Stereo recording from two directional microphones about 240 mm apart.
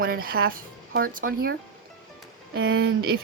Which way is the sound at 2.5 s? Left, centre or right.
Right.